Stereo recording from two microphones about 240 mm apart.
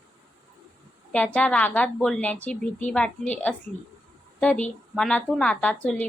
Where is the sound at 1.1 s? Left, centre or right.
Centre.